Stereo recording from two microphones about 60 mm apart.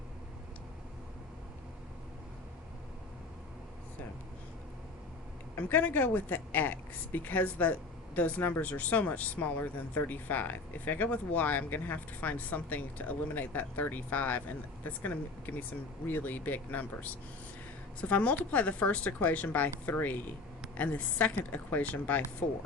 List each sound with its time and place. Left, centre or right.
5.5 s speech: left